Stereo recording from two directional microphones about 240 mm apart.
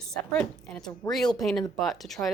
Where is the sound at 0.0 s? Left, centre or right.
Centre.